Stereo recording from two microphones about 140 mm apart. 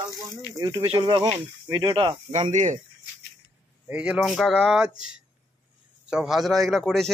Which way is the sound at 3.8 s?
10° right (ahead or behind).